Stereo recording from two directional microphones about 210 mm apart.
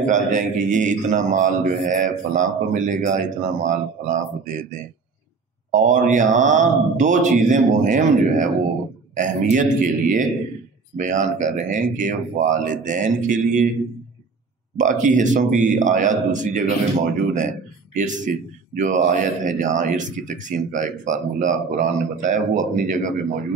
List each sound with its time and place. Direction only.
0.0 s speech: 35° right (ahead or behind)
14.8 s speech: 35° right (ahead or behind)